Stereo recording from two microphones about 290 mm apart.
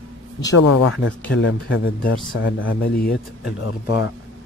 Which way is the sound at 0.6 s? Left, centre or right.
Left.